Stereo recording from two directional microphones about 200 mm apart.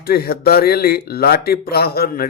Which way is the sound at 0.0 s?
50° left (ahead or behind).